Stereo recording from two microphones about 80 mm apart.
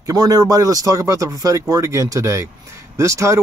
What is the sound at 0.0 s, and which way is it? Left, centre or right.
Speech, right.